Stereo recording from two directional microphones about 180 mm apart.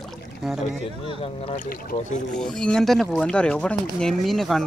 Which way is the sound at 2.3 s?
5° left (ahead or behind).